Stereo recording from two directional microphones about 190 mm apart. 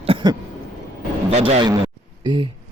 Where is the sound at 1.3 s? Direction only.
35° right (ahead or behind).